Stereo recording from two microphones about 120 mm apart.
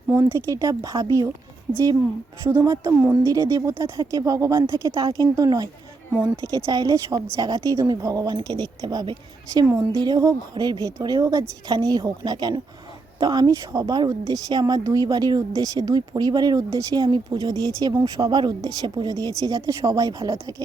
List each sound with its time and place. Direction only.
0.1 s a woman's voice: 20° right (ahead or behind)